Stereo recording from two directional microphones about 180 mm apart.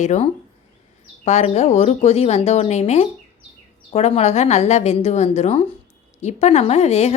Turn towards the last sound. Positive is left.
turn(degrees=35)  # may be behind; listen again after turning